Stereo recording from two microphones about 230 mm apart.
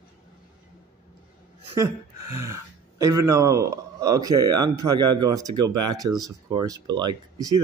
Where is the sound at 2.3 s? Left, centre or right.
Centre.